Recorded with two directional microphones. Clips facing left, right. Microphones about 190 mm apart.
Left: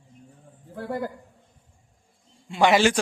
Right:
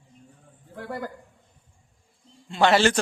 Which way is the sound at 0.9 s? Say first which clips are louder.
Left 4 dB; 25° left (ahead or behind).